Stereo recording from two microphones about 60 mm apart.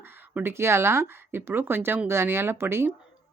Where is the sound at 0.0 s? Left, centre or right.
Right.